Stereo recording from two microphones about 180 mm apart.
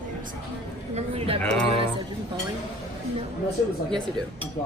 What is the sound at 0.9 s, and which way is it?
Speech, 30° right (ahead or behind).